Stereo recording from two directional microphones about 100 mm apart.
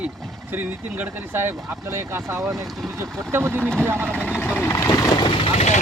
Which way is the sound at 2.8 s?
30° right (ahead or behind).